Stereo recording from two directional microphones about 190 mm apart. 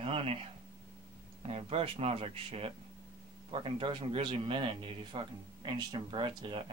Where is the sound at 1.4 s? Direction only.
30° right (ahead or behind).